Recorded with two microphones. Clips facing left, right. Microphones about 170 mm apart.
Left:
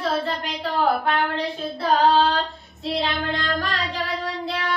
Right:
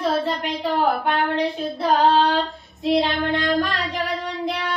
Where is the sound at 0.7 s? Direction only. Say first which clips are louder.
Even; 20° right (ahead or behind).